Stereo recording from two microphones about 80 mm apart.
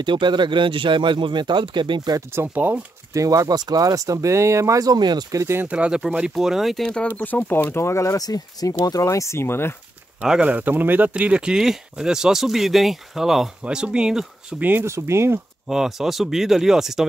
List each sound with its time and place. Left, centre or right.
0.0 s speech: right
2.3 s speech: right
3.1 s speech: right
5.4 s speech: right
5.7 s speech: centre
7.2 s speech: left
10.2 s speech: centre
14.6 s speech: right
14.9 s speech: right
15.7 s speech: centre